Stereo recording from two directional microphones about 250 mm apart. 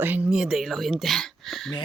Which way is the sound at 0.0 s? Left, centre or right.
Centre.